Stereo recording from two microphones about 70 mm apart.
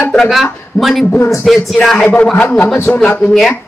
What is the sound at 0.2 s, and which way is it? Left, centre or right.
A woman's voice, centre.